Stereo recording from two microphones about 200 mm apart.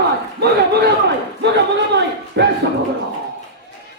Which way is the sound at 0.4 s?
55° right (ahead or behind).